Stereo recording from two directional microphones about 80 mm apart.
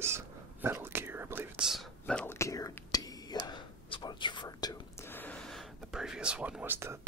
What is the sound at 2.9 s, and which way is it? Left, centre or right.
Whispering, left.